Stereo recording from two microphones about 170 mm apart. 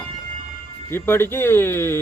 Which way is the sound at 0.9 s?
15° left (ahead or behind).